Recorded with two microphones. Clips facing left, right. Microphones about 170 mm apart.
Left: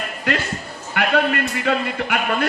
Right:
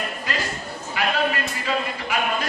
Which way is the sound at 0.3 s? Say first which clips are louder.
Left 8 dB; 65° left (ahead or behind).